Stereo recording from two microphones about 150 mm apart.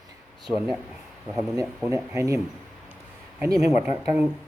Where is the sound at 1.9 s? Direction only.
20° right (ahead or behind).